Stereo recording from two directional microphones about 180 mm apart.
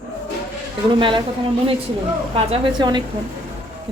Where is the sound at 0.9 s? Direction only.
25° right (ahead or behind).